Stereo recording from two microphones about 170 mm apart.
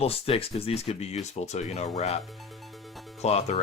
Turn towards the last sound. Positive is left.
turn(degrees=40)  # may be behind; listen again after turning